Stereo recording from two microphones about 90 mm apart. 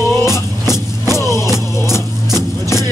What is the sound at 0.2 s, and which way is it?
Music, 30° left (ahead or behind).